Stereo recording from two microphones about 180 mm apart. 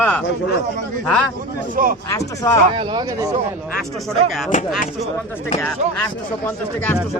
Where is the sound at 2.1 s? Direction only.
15° left (ahead or behind).